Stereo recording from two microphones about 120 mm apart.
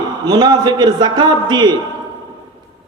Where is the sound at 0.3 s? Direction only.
35° right (ahead or behind).